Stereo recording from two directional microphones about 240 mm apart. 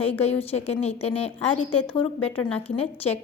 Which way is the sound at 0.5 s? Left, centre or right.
Left.